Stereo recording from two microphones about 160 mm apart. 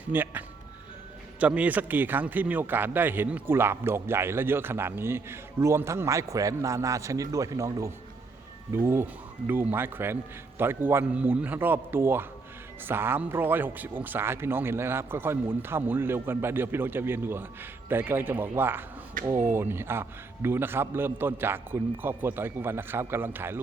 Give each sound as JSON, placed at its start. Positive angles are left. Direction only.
{"t": 0.1, "sound": "speech", "side_deg": -10}
{"t": 19.2, "sound": "speech", "side_deg": -55}
{"t": 19.5, "sound": "speech", "side_deg": -15}